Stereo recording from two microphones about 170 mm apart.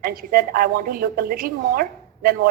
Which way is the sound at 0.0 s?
60° right (ahead or behind).